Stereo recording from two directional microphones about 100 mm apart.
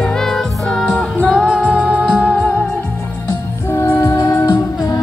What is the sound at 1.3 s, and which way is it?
Music, 10° right (ahead or behind).